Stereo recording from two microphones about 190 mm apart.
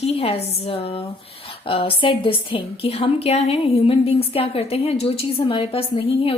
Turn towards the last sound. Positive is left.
turn(degrees=30)  # may be behind; listen again after turning